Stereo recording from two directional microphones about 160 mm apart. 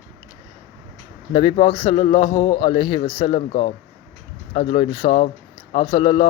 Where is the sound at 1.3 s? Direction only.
35° left (ahead or behind).